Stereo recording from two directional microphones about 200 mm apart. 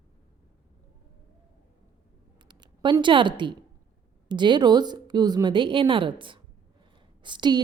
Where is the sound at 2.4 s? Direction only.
20° right (ahead or behind).